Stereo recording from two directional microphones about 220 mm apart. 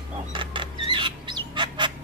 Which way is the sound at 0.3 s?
20° right (ahead or behind).